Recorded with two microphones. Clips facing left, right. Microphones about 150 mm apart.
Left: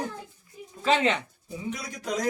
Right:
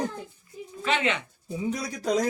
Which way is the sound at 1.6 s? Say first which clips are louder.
Right 5 dB; 35° right (ahead or behind).